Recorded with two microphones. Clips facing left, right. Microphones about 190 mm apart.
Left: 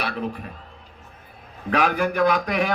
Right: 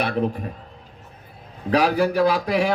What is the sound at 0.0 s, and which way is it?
Speech, 45° right (ahead or behind).